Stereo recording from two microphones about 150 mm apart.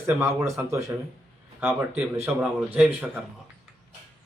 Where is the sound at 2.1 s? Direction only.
15° right (ahead or behind).